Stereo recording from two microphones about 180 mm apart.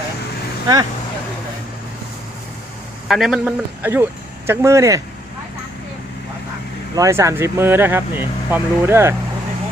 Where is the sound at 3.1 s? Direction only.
Centre (ahead or behind); by 5.0 s 15° right (ahead or behind).